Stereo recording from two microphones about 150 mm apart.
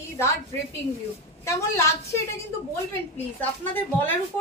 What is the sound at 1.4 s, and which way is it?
Speech, 20° left (ahead or behind).